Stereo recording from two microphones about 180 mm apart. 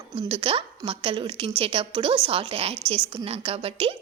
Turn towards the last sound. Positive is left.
turn(degrees=-30)  # may be behind; listen again after turning